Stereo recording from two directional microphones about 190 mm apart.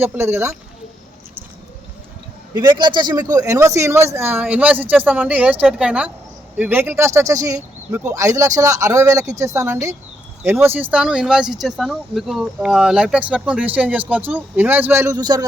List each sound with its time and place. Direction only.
0.0 s speech: 15° right (ahead or behind)
2.6 s speech: 25° right (ahead or behind)